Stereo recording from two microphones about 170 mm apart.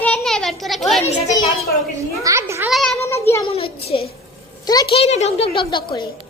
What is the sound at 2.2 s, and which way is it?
Speech, 15° right (ahead or behind).